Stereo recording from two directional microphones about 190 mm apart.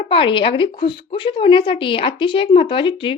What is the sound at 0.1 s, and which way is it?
A woman's voice, 25° left (ahead or behind).